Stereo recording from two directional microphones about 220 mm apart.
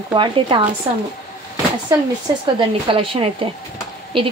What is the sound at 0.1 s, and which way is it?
Speech, 20° right (ahead or behind).